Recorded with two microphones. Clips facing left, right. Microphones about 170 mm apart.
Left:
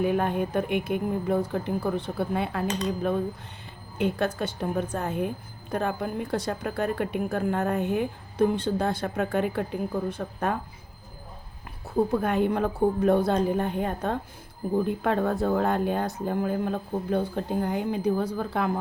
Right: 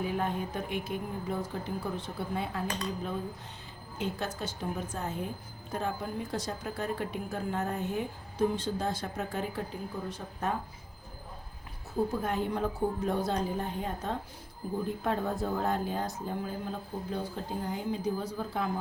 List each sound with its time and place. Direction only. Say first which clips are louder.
0.0 s speech: left 7 dB; 60° left (ahead or behind)
3.9 s speech: left 9 dB; 60° left (ahead or behind)
12.1 s speech: left 7 dB; 65° left (ahead or behind)